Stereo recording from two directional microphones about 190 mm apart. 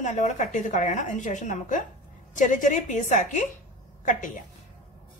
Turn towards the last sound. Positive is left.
turn(degrees=40)  # may be behind; listen again after turning